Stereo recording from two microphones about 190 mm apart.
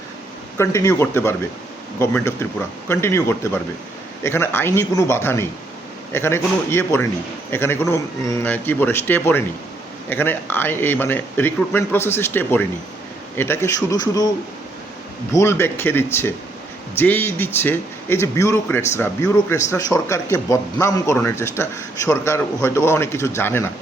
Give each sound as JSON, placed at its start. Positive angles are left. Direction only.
{"t": 0.6, "sound": "speech", "side_deg": 15}
{"t": 15.3, "sound": "speech", "side_deg": 15}